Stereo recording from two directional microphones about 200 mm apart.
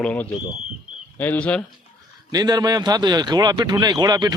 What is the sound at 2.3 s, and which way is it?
Speech, 20° right (ahead or behind).